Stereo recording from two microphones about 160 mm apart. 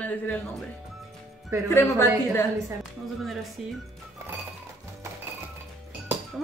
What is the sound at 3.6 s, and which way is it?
Speech, centre (ahead or behind).